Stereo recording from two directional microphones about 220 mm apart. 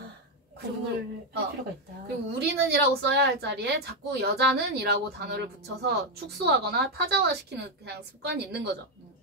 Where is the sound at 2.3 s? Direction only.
50° right (ahead or behind).